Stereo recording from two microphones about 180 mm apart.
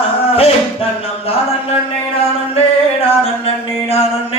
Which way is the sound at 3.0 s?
35° left (ahead or behind).